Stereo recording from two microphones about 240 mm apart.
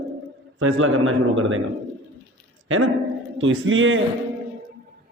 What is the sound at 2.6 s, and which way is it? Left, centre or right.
A man's voice, right.